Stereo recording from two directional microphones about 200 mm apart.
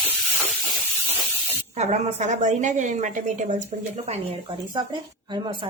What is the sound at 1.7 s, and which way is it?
A woman's voice, 35° right (ahead or behind).